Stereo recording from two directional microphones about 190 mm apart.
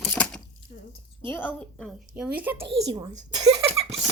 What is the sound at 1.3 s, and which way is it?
Speech, 10° left (ahead or behind).